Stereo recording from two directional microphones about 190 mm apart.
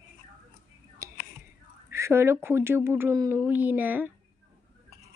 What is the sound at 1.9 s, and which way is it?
A woman's voice, 15° right (ahead or behind).